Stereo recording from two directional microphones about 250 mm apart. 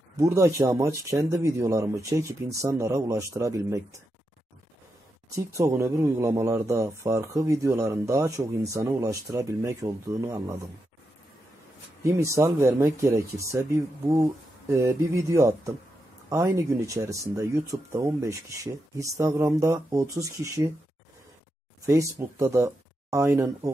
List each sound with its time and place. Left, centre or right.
0.2 s speech: centre
5.3 s speech: centre
12.0 s speech: centre
21.8 s speech: centre